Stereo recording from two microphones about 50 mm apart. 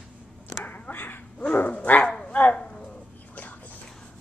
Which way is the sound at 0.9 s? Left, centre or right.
Left.